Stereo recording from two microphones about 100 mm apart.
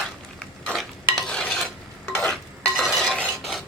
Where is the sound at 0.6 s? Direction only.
5° left (ahead or behind).